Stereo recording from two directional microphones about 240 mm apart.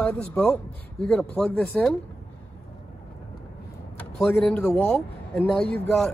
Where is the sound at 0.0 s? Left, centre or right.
Centre.